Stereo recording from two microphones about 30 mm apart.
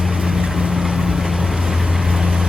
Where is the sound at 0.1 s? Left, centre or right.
Centre.